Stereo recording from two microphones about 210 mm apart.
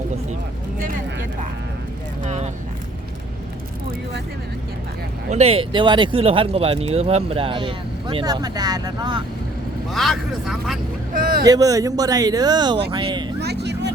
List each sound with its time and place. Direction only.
2.2 s vehicle: 30° right (ahead or behind)
5.3 s speech: 30° right (ahead or behind)
9.9 s speech: centre (ahead or behind)
11.1 s speech: 40° right (ahead or behind)
11.4 s speech: 15° right (ahead or behind)
13.4 s vehicle: 50° right (ahead or behind)